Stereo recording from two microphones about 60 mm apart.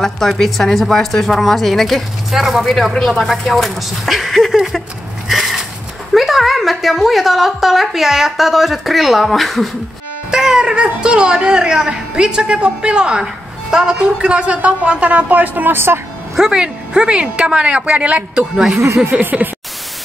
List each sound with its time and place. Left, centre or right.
0.0 s a woman's voice: centre
5.3 s a sound: centre
6.1 s a woman's voice: centre
10.3 s a woman's voice: centre; by 16.0 s right
16.3 s a woman's voice: centre
19.1 s a sound: right